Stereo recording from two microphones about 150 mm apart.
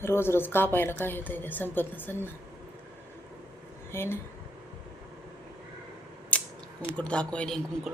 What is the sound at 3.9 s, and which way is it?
Speech, 15° left (ahead or behind).